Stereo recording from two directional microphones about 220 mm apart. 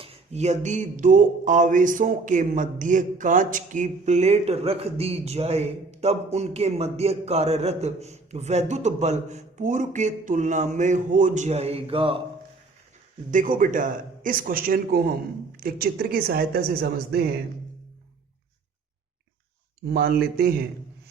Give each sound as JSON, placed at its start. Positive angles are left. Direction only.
{"t": 0.0, "sound": "speech", "side_deg": -30}
{"t": 13.3, "sound": "a woman's voice", "side_deg": -35}
{"t": 19.9, "sound": "a woman's voice", "side_deg": -45}